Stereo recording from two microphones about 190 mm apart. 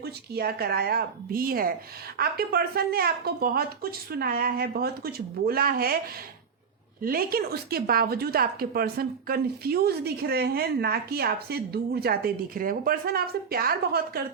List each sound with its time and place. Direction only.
0.0 s a woman's voice: 55° right (ahead or behind)
7.0 s a woman's voice: 50° right (ahead or behind)